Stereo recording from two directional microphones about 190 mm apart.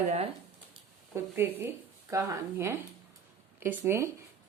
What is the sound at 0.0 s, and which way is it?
Speech, 35° right (ahead or behind).